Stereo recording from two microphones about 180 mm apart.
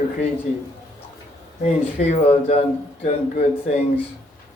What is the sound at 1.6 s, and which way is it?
Speech, 40° left (ahead or behind).